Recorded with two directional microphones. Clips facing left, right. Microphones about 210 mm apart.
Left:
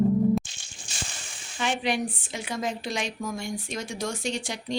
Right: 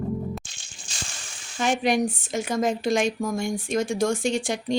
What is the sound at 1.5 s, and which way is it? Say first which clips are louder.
A woman's voice: right 5 dB; 45° right (ahead or behind).